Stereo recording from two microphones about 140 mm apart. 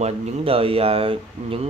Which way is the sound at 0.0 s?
40° right (ahead or behind).